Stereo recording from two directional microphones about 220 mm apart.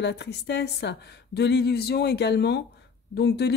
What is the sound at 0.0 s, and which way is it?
Speech, 50° left (ahead or behind).